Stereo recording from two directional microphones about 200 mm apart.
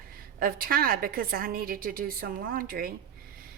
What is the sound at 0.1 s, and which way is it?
A woman's voice, 45° right (ahead or behind).